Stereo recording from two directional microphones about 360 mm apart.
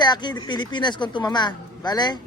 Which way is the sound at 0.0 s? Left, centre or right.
Centre.